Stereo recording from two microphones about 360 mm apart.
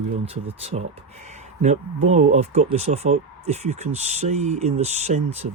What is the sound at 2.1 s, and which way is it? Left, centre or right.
Speech, centre.